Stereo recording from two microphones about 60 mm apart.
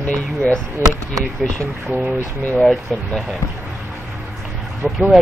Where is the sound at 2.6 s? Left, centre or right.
Centre.